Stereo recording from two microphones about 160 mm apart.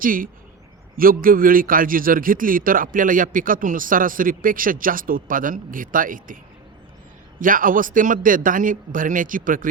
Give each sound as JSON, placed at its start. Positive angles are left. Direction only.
{"t": 0.0, "sound": "a man's voice", "side_deg": -60}